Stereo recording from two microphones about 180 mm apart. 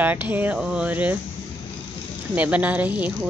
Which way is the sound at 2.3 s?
10° right (ahead or behind).